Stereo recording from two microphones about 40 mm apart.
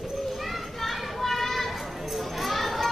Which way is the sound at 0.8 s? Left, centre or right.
Centre.